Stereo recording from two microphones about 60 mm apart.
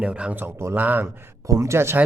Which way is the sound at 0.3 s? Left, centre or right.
Right.